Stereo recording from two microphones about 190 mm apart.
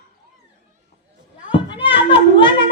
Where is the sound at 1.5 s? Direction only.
25° left (ahead or behind).